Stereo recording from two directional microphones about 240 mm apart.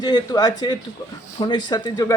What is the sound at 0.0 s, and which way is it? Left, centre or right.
A man's voice, centre.